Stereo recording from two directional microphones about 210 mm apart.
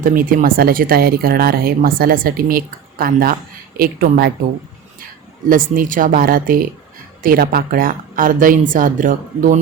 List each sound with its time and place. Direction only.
0.0 s speech: 40° right (ahead or behind)
5.5 s a woman's voice: 40° right (ahead or behind)